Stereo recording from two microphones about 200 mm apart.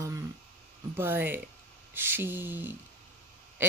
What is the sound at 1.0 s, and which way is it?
Speech, 10° right (ahead or behind).